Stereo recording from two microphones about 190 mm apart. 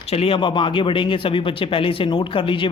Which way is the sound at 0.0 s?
30° left (ahead or behind).